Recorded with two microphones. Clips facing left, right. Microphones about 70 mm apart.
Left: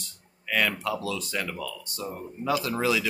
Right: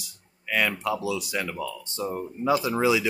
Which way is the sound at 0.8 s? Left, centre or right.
Centre.